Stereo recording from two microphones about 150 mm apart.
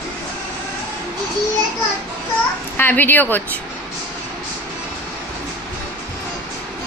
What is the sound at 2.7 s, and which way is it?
Speech, 10° left (ahead or behind).